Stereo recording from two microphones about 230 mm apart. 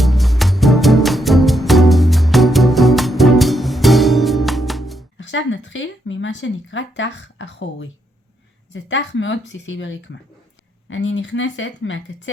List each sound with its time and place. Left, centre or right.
0.0 s music: centre
5.1 s speech: left